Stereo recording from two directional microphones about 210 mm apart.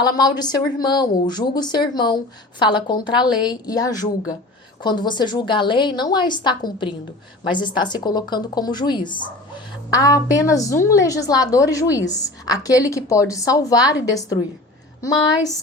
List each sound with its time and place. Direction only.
0.0 s a woman's voice: 20° left (ahead or behind)